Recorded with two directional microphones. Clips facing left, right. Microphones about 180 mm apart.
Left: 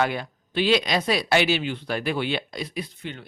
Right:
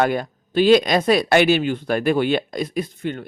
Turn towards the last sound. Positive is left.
turn(degrees=-50)  # may be behind; listen again after turning